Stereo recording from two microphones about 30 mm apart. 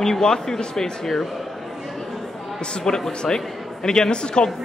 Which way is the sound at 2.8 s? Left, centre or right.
Left.